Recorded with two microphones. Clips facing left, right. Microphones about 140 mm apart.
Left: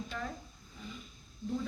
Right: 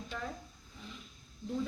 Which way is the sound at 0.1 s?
5° right (ahead or behind).